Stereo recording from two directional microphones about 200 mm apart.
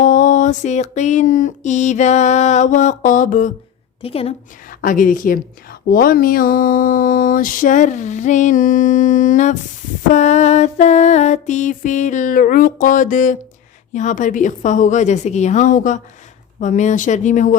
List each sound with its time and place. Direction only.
0.0 s mantra: 40° left (ahead or behind)
4.0 s a woman's voice: 30° left (ahead or behind)
4.7 s a woman's voice: 40° left (ahead or behind)
5.9 s mantra: 45° left (ahead or behind)